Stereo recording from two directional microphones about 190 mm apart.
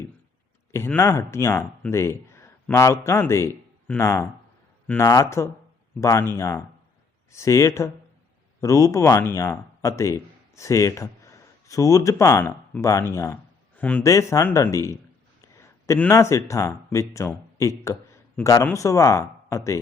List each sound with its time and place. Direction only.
0.7 s speech: 15° left (ahead or behind)